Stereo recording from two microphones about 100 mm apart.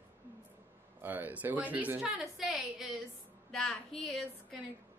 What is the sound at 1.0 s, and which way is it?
A woman's voice, 20° right (ahead or behind).